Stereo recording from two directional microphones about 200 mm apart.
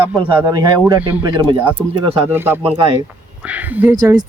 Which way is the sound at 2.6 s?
25° right (ahead or behind).